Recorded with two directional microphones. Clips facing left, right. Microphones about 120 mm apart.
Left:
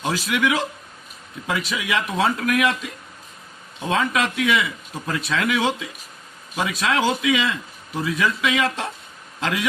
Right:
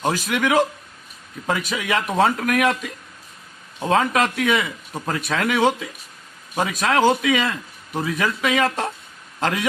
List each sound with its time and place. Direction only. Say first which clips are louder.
0.0 s a man's voice: right 1 dB; 45° right (ahead or behind)
3.8 s a man's voice: right 3 dB; 40° right (ahead or behind)